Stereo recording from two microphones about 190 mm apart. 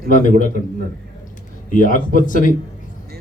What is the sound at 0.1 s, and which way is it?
Speech, 45° left (ahead or behind).